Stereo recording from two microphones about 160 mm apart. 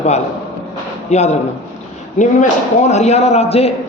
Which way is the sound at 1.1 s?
45° left (ahead or behind).